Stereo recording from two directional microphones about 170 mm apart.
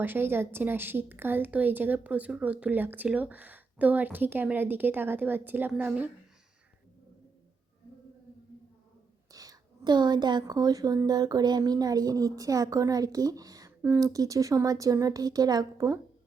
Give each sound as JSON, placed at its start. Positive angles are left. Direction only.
{"t": 0.0, "sound": "a woman's voice", "side_deg": -10}
{"t": 9.3, "sound": "a woman's voice", "side_deg": -20}